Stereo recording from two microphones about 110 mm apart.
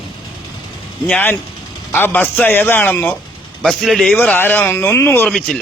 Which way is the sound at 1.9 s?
15° left (ahead or behind).